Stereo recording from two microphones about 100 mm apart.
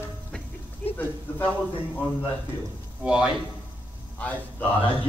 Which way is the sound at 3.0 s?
10° right (ahead or behind).